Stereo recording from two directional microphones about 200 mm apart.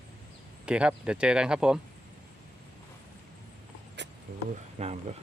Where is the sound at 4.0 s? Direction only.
60° right (ahead or behind).